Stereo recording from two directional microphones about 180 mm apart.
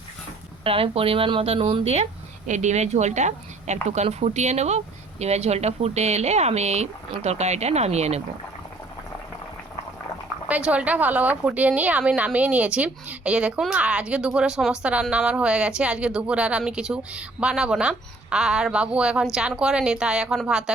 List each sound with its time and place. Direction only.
0.6 s speech: 30° right (ahead or behind)
10.5 s a woman's voice: 5° right (ahead or behind)